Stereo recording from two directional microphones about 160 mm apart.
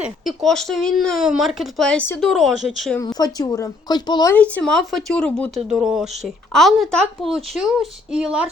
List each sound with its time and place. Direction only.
0.0 s speech: centre (ahead or behind)
3.0 s speech: 25° left (ahead or behind)
4.4 s speech: 5° left (ahead or behind)
5.6 s speech: 5° right (ahead or behind)